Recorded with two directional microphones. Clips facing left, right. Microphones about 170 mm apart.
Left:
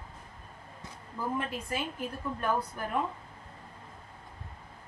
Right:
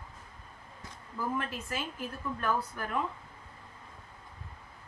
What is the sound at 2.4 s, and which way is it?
Speech, 15° left (ahead or behind).